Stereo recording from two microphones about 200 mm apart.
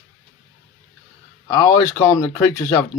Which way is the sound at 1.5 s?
15° left (ahead or behind).